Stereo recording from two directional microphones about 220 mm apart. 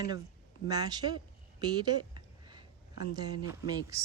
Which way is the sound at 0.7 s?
20° right (ahead or behind).